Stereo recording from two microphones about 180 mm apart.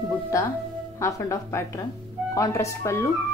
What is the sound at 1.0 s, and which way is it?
Speech, 15° left (ahead or behind).